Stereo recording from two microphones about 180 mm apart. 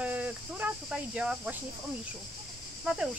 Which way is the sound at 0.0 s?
10° right (ahead or behind).